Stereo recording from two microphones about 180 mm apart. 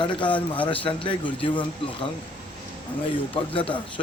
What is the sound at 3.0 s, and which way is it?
Speech, 30° left (ahead or behind).